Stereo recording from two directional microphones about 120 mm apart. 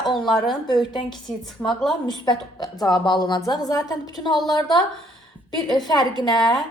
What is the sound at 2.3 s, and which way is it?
A woman's voice, 35° left (ahead or behind).